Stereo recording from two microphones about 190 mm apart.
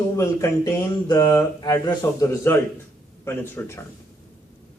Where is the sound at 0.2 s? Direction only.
15° left (ahead or behind).